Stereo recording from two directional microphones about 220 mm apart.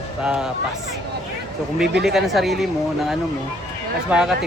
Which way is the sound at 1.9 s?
50° right (ahead or behind).